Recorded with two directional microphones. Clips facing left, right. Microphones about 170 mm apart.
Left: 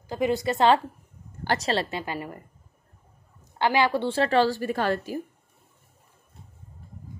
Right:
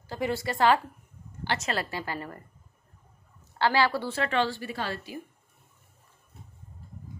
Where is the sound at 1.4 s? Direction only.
45° left (ahead or behind).